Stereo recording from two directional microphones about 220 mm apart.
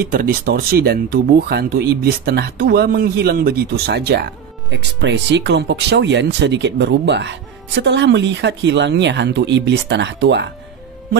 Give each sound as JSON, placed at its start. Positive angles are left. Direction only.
{"t": 0.0, "sound": "speech", "side_deg": -40}